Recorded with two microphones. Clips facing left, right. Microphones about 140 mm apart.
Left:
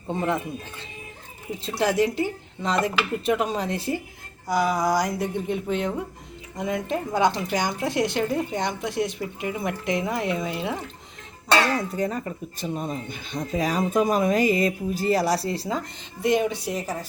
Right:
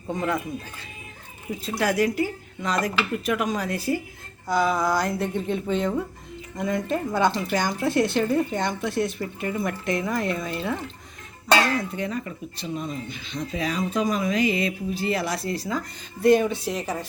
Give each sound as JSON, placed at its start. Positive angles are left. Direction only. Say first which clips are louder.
{"t": 0.1, "sound": "speech", "louder": "left 1 dB", "side_deg": 30}
{"t": 1.6, "sound": "speech", "louder": "left 1 dB", "side_deg": 25}
{"t": 4.4, "sound": "speech", "louder": "even", "side_deg": 10}
{"t": 11.7, "sound": "speech", "louder": "left 2 dB", "side_deg": 40}
{"t": 16.2, "sound": "speech", "louder": "right 4 dB", "side_deg": 15}
{"t": 16.7, "sound": "a woman's voice", "louder": "right 1 dB", "side_deg": 0}